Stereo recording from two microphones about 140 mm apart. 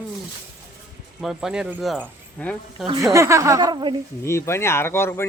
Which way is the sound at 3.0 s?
20° right (ahead or behind).